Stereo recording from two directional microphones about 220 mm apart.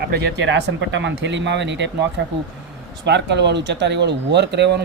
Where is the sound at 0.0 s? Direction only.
50° right (ahead or behind).